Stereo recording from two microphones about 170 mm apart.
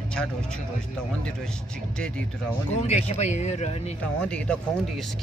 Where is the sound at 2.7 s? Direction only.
40° left (ahead or behind).